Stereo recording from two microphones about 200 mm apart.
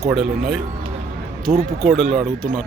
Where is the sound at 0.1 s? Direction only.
Centre (ahead or behind).